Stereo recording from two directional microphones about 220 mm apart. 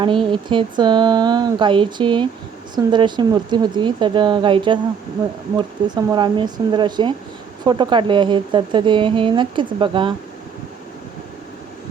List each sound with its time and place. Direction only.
0.0 s a woman's voice: 25° right (ahead or behind)